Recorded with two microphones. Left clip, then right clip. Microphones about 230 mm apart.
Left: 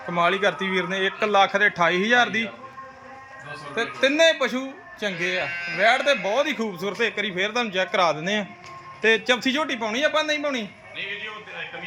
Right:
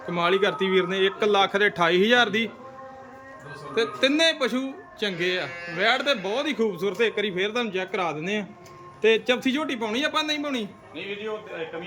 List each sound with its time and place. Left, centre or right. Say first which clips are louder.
0.1 s a man's voice: left 1 dB; centre
3.8 s a man's voice: left 2 dB; centre